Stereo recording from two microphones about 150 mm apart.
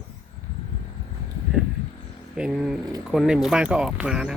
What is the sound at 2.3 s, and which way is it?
Speech, 5° right (ahead or behind).